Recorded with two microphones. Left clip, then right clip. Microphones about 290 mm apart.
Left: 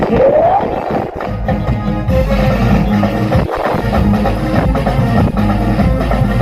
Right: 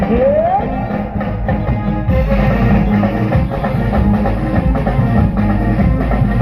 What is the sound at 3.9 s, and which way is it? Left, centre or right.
Vehicle, left.